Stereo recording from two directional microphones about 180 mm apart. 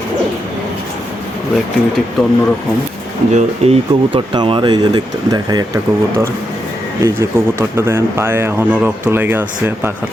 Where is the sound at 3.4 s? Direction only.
35° right (ahead or behind).